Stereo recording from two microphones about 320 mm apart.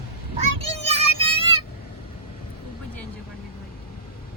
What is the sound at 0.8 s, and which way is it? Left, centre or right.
Music, centre.